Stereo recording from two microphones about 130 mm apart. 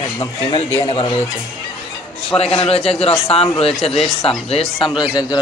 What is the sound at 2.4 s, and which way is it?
A man's voice, 50° left (ahead or behind).